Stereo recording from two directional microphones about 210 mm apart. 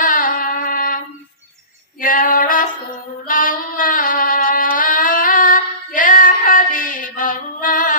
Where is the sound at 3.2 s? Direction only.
40° left (ahead or behind).